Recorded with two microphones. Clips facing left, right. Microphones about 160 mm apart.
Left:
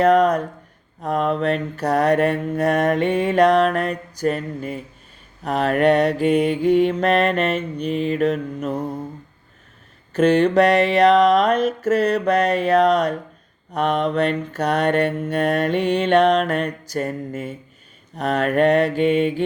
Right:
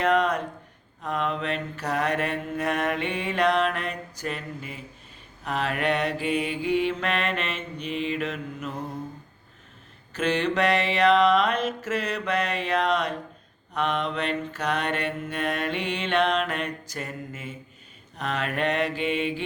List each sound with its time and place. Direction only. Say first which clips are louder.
0.0 s mantra: left 8 dB; 40° left (ahead or behind)
10.2 s mantra: left 9 dB; 45° left (ahead or behind)